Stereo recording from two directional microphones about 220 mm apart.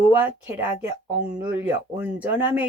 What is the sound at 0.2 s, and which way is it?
Speech, 5° right (ahead or behind).